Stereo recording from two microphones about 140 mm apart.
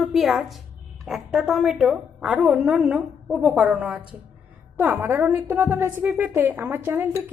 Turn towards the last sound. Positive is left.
turn(degrees=-15)  # may be behind; listen again after turning